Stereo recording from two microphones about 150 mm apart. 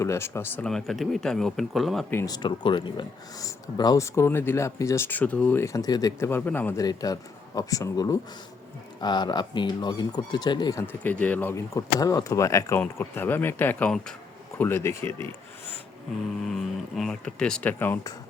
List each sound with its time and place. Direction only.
0.0 s speech: 15° left (ahead or behind)
0.6 s speech: centre (ahead or behind)
2.0 s speech: 15° left (ahead or behind)
2.3 s speech: 30° left (ahead or behind); by 6.8 s 15° left (ahead or behind)
6.8 s speech: 25° left (ahead or behind); by 14.2 s 5° left (ahead or behind)
14.6 s speech: 15° left (ahead or behind)
16.5 s speech: centre (ahead or behind)